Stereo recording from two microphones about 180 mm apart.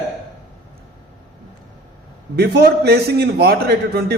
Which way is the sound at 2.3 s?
65° right (ahead or behind).